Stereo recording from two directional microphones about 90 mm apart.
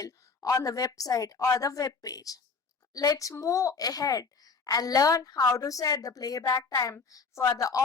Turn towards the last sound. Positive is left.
turn(degrees=40)  # may be behind; listen again after turning